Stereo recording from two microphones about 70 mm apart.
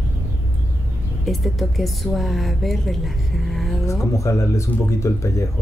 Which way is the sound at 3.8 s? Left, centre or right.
Left.